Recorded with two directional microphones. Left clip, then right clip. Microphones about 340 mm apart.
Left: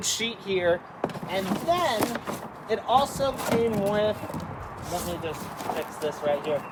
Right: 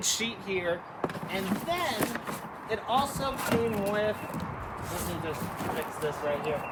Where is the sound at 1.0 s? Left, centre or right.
Centre.